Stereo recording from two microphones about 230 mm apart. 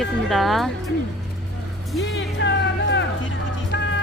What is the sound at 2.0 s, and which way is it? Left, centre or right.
Music, left.